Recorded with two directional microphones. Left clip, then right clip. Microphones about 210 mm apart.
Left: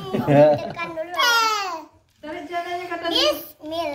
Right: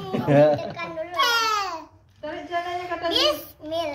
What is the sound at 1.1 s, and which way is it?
Speech, 10° left (ahead or behind).